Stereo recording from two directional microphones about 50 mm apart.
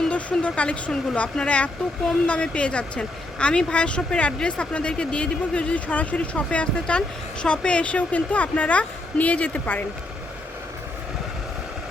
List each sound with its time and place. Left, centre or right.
0.1 s a woman's voice: left